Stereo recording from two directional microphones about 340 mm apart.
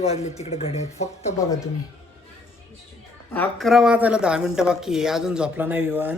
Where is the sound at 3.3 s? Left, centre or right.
Centre.